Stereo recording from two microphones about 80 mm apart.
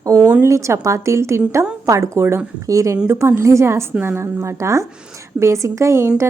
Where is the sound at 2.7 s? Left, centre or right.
Right.